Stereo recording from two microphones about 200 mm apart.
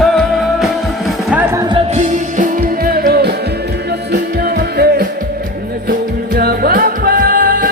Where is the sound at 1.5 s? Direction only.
20° right (ahead or behind).